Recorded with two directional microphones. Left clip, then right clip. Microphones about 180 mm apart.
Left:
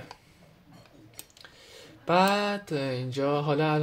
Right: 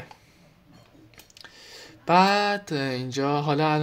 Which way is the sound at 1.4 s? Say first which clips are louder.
Right 7 dB; 30° right (ahead or behind).